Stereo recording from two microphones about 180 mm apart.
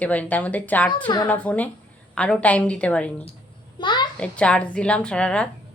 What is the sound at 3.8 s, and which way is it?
Speech, 25° left (ahead or behind).